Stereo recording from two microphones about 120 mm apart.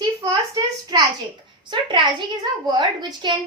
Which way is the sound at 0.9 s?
40° right (ahead or behind).